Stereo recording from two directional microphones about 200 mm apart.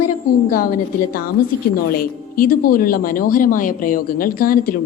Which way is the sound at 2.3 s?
45° left (ahead or behind).